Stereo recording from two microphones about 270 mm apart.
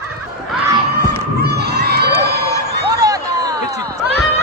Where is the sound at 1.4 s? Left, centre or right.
Right.